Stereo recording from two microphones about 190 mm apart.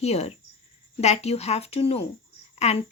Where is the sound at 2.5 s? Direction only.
35° left (ahead or behind).